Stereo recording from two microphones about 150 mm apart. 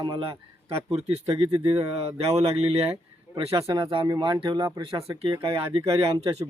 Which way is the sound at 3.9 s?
30° right (ahead or behind).